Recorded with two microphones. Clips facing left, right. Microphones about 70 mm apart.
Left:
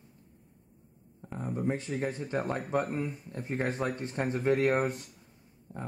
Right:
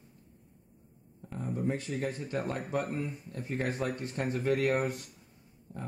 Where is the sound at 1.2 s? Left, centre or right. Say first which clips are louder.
Left 1 dB; left.